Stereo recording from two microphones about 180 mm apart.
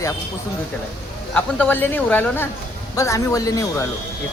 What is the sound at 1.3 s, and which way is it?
Speech, 10° left (ahead or behind).